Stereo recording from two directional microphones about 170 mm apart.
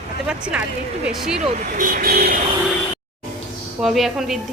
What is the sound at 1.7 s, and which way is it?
Speech, 50° right (ahead or behind).